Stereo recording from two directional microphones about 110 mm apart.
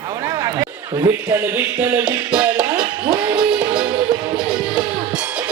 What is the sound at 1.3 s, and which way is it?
Speech, 20° right (ahead or behind).